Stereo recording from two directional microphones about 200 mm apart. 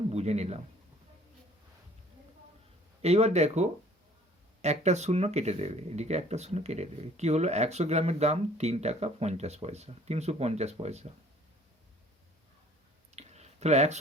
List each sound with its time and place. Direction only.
0.1 s speech: 35° right (ahead or behind)
3.0 s speech: 30° right (ahead or behind)
13.1 s a sound: 35° right (ahead or behind)